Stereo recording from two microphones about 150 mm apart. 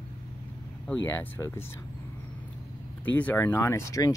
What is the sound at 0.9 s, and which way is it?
Speech, 15° left (ahead or behind).